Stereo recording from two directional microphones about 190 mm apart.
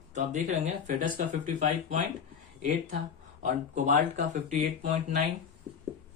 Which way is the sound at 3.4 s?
40° right (ahead or behind).